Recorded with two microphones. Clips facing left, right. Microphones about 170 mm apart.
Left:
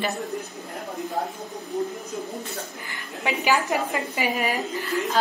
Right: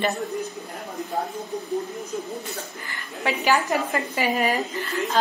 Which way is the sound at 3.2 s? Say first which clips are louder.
Right 1 dB; 15° left (ahead or behind).